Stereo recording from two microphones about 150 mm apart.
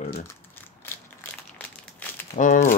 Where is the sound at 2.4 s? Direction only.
60° left (ahead or behind).